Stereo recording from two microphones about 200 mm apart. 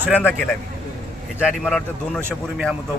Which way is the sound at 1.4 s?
Centre (ahead or behind).